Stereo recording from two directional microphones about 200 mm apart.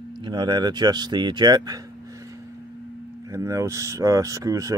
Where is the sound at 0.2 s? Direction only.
20° right (ahead or behind).